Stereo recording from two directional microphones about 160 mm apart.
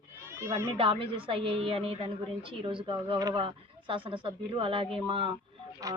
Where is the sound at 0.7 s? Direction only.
35° right (ahead or behind).